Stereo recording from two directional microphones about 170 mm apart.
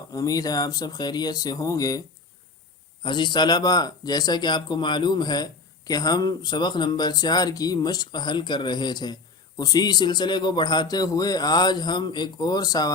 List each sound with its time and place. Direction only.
0.1 s speech: 20° left (ahead or behind)